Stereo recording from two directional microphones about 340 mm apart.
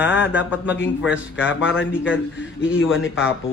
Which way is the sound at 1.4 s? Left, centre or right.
Left.